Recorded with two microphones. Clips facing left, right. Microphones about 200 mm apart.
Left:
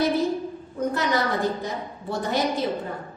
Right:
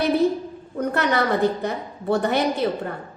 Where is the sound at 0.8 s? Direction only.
60° right (ahead or behind).